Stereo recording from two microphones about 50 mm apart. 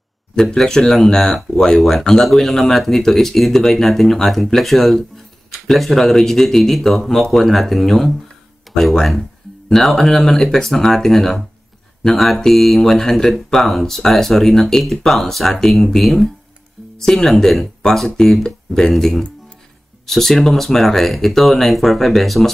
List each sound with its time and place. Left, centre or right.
0.6 s speech: centre